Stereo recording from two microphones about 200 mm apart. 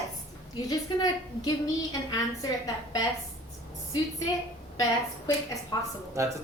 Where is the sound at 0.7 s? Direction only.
20° left (ahead or behind).